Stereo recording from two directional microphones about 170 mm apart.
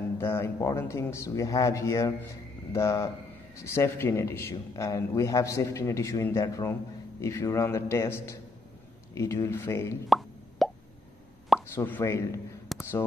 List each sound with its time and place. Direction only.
0.2 s a man's voice: 15° left (ahead or behind)
10.0 s plop: centre (ahead or behind)
11.6 s a man's voice: 15° left (ahead or behind)
12.7 s a sound: centre (ahead or behind)